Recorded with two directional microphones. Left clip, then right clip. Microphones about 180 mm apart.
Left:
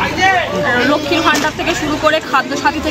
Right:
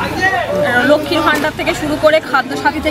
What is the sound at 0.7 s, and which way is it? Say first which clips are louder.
Chatter: right 3 dB; 25° right (ahead or behind).